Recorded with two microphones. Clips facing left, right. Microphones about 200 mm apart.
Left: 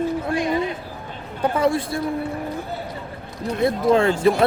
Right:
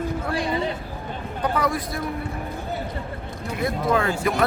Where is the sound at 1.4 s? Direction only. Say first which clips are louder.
Left 5 dB; 25° left (ahead or behind).